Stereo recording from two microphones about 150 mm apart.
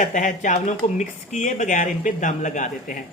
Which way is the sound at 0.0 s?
60° left (ahead or behind).